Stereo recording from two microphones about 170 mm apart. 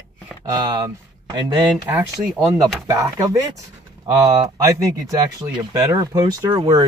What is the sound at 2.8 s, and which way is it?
Speech, 20° right (ahead or behind).